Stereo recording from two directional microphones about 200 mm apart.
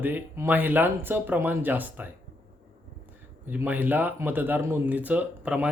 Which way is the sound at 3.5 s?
10° right (ahead or behind).